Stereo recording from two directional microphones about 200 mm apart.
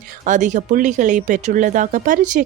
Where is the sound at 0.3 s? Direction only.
40° right (ahead or behind).